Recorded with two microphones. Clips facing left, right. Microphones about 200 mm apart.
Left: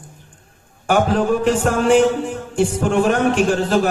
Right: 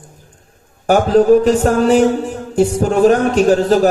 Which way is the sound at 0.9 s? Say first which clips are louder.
Right 7 dB; 40° right (ahead or behind).